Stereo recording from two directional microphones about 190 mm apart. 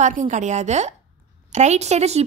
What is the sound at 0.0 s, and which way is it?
A woman's voice, 40° right (ahead or behind).